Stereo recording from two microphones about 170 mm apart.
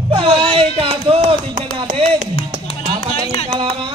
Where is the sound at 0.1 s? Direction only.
30° right (ahead or behind).